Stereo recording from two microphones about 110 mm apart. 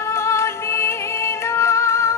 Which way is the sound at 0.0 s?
25° left (ahead or behind).